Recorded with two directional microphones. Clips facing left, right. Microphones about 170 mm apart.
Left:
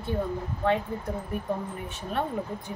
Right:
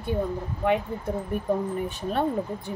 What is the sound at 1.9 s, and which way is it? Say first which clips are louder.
Speech: right 4 dB; 35° right (ahead or behind).